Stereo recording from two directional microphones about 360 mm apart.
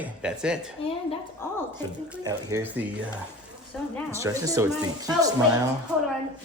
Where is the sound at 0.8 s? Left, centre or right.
Centre.